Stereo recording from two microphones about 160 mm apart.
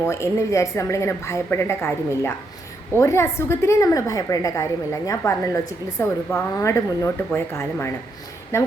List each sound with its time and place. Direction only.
0.0 s a woman's voice: 15° left (ahead or behind)